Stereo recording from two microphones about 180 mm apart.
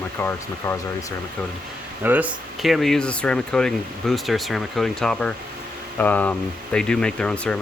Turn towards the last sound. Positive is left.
turn(degrees=5)  # may be behind; listen again after turning